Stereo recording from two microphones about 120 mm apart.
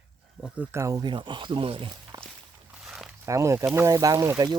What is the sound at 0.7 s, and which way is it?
Speech, 25° right (ahead or behind).